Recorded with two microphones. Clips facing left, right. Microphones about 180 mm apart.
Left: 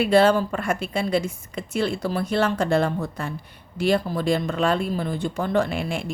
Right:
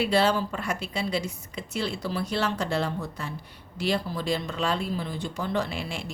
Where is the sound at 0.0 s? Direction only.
50° left (ahead or behind).